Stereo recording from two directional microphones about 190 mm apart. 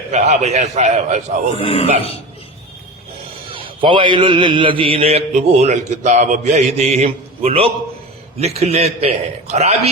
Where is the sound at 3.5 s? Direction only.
25° right (ahead or behind).